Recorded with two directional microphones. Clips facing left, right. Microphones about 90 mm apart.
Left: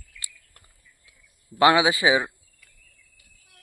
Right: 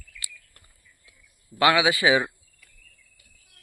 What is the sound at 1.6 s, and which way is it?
Speech, 25° left (ahead or behind).